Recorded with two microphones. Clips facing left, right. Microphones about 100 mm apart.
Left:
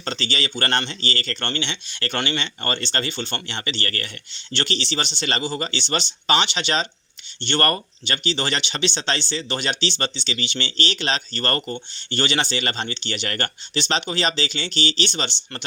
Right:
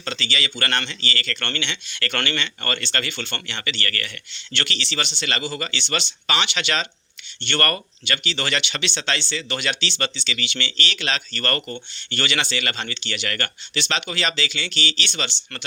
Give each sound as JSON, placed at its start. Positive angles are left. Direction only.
{"t": 0.0, "sound": "speech", "side_deg": 35}